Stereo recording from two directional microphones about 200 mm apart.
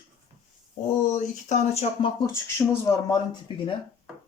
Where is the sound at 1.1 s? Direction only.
35° left (ahead or behind).